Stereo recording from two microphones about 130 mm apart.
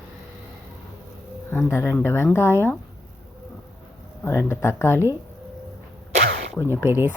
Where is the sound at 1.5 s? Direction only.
20° left (ahead or behind).